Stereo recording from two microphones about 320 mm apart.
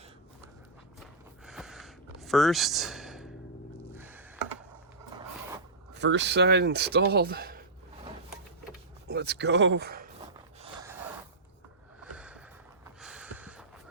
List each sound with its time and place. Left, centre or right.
1.5 s a sound: centre
5.9 s speech: right
9.0 s speech: right
10.6 s gasp: centre
12.1 s snort: centre
13.0 s a sound: centre